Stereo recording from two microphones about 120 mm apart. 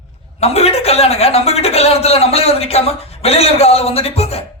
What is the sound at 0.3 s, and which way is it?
A woman's voice, 60° left (ahead or behind).